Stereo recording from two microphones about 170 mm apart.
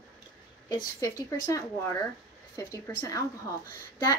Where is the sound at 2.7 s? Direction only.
20° left (ahead or behind).